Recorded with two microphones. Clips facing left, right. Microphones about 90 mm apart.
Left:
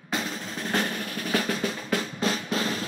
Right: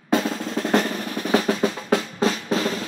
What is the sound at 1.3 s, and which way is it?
Drum roll, 30° right (ahead or behind).